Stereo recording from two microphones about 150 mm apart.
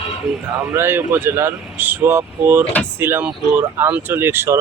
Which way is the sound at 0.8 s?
15° right (ahead or behind).